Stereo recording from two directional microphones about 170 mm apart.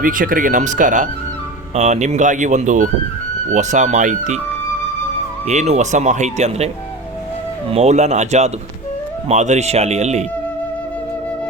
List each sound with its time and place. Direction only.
0.0 s speech: 55° right (ahead or behind)
5.5 s speech: 40° right (ahead or behind)
7.7 s speech: 40° right (ahead or behind)